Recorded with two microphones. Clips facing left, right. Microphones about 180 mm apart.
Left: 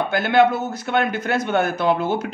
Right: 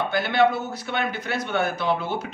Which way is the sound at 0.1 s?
50° left (ahead or behind).